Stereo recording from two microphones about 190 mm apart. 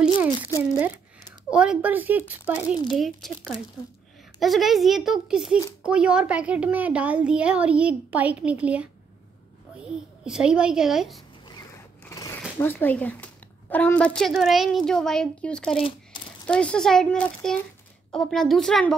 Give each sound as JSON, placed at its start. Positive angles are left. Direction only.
{"t": 1.5, "sound": "a child's voice", "side_deg": -5}
{"t": 11.4, "sound": "zipper", "side_deg": 20}
{"t": 14.9, "sound": "a child's voice", "side_deg": 5}
{"t": 15.7, "sound": "speech", "side_deg": 30}
{"t": 16.4, "sound": "a child's voice", "side_deg": 5}